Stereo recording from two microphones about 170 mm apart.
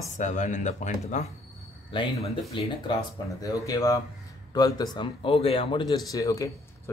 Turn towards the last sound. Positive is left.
turn(degrees=20)  # may be behind; listen again after turning